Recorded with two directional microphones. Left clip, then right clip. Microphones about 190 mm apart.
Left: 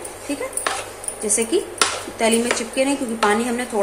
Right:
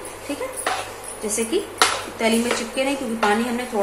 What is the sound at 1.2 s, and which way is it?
A woman's voice, 20° left (ahead or behind).